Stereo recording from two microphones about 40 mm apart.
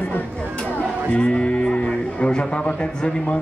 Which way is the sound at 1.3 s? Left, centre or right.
Left.